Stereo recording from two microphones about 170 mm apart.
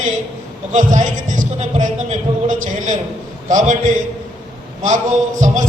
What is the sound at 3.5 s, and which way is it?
A man's voice, 50° right (ahead or behind).